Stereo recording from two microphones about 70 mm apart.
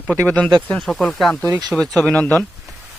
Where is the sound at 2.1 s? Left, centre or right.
Centre.